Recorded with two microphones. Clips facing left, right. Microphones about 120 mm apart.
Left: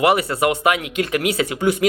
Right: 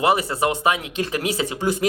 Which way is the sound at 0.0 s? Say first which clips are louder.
Left 2 dB; 65° left (ahead or behind).